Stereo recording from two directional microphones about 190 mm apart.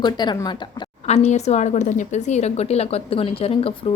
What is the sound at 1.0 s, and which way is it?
A woman's voice, 35° left (ahead or behind).